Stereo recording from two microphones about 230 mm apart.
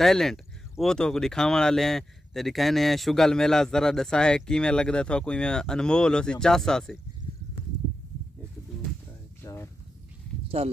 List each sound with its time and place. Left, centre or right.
0.0 s speech: centre
9.4 s a sound: centre
10.6 s speech: right